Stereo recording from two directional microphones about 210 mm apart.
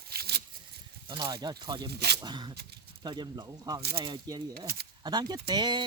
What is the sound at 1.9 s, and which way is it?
Speech, 50° right (ahead or behind).